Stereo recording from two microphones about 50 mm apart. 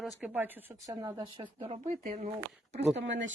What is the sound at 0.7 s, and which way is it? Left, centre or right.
Speech, right.